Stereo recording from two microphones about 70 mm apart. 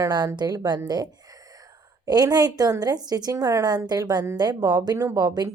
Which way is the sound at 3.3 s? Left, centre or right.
Right.